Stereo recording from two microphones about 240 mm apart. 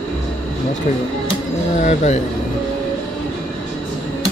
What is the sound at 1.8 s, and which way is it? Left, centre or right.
Speech, left.